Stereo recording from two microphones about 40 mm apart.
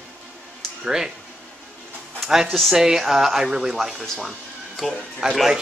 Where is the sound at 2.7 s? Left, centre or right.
Centre.